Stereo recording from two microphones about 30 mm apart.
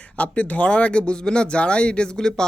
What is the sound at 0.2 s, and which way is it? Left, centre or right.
Speech, left.